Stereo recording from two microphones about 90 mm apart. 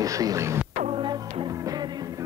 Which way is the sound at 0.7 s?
65° right (ahead or behind).